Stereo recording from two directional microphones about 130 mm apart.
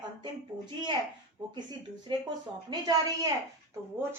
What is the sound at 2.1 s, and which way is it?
Speech, 35° right (ahead or behind).